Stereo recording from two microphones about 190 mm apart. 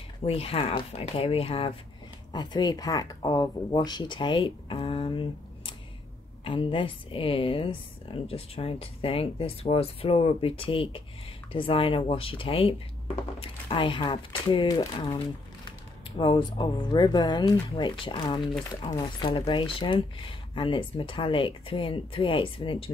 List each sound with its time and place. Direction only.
0.2 s a woman's voice: 30° left (ahead or behind)
6.4 s a woman's voice: 25° left (ahead or behind)